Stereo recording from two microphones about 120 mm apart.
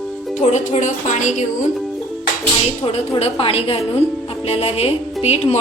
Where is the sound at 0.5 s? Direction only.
85° left.